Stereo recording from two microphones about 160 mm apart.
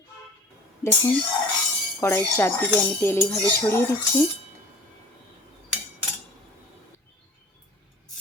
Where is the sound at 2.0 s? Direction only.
15° left (ahead or behind).